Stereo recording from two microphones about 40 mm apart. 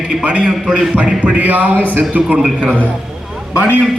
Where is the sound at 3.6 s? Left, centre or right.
Right.